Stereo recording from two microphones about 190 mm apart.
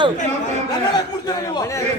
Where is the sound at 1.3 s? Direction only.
20° left (ahead or behind).